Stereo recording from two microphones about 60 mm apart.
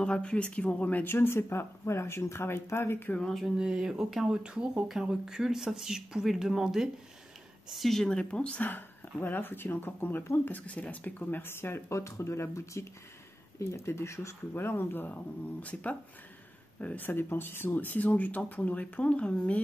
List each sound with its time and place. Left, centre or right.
0.0 s speech: centre
1.0 s speech: left
3.5 s speech: centre
4.8 s speech: centre
7.7 s speech: centre
8.6 s speech: left
14.5 s speech: left